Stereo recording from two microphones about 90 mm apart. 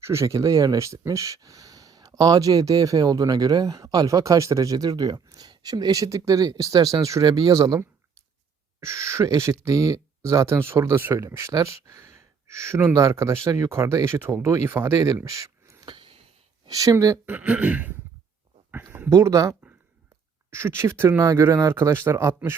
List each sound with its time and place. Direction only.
0.0 s speech: 30° right (ahead or behind)
8.8 s speech: 30° right (ahead or behind)
15.9 s a sound: 80° right
16.6 s speech: 40° right (ahead or behind)
17.2 s a sound: 20° right (ahead or behind)
19.1 s speech: 40° right (ahead or behind)